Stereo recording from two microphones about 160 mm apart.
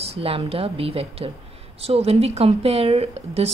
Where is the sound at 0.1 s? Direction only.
40° right (ahead or behind).